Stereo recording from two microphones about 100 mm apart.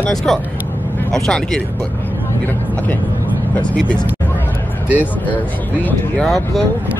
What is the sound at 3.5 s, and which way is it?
Speech, 10° left (ahead or behind).